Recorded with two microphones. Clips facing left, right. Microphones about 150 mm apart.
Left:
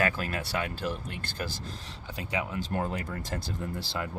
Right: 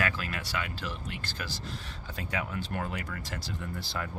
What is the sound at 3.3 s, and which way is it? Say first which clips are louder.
Speech: left 4 dB; 50° left (ahead or behind).